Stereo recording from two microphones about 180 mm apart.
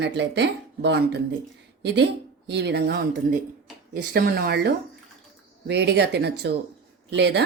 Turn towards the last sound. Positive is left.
turn(degrees=-70)  # may be behind; listen again after turning